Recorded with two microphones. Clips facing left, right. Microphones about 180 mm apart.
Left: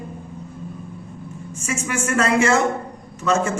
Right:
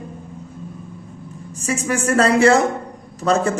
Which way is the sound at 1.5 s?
35° right (ahead or behind).